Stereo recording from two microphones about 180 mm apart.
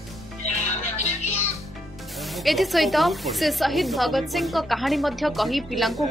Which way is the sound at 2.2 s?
Centre (ahead or behind).